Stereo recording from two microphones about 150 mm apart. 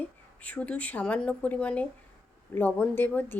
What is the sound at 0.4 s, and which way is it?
A woman's voice, 10° left (ahead or behind).